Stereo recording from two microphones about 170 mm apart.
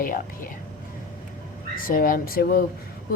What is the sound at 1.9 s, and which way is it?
Speech, 55° left (ahead or behind).